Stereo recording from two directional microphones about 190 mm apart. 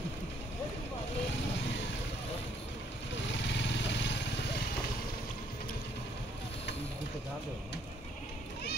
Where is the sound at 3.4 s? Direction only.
70° left (ahead or behind).